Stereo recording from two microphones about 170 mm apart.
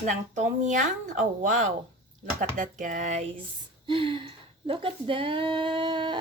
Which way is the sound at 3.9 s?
30° right (ahead or behind).